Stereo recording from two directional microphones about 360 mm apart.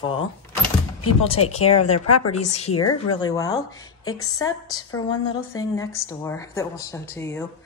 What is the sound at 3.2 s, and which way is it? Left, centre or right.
Speech, centre.